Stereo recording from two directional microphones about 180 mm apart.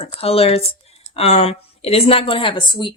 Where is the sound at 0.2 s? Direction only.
35° left (ahead or behind).